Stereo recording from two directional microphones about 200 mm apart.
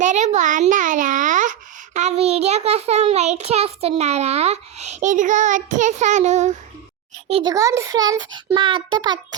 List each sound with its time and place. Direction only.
0.0 s a child's voice: 35° right (ahead or behind)
7.5 s a child's voice: 15° right (ahead or behind)